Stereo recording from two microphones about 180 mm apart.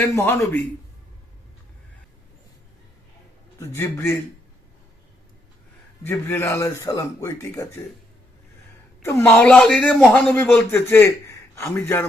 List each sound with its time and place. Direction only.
0.0 s speech: 15° left (ahead or behind)
3.6 s speech: 15° left (ahead or behind)
6.0 s speech: 10° left (ahead or behind)
9.0 s speech: 15° left (ahead or behind)